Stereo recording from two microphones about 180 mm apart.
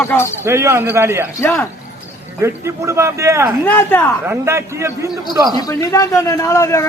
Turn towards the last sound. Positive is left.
turn(degrees=15)  # may be behind; listen again after turning